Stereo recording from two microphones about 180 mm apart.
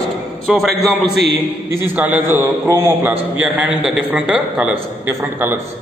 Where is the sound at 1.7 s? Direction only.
10° right (ahead or behind).